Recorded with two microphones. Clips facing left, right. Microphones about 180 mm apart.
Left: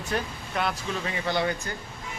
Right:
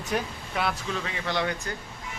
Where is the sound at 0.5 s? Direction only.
5° right (ahead or behind).